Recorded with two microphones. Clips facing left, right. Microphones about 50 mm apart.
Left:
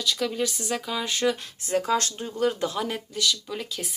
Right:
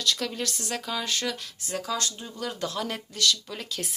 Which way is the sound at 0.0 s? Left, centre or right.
Centre.